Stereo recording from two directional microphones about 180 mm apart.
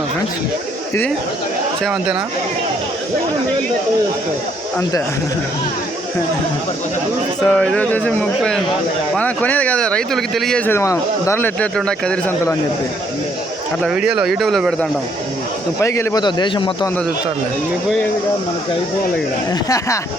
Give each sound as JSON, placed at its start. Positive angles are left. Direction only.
{"t": 1.8, "sound": "speech", "side_deg": 0}
{"t": 7.4, "sound": "speech", "side_deg": 5}
{"t": 10.7, "sound": "speech", "side_deg": 15}
{"t": 13.8, "sound": "speech", "side_deg": -5}
{"t": 15.8, "sound": "a man's voice", "side_deg": 15}
{"t": 19.6, "sound": "speech", "side_deg": 15}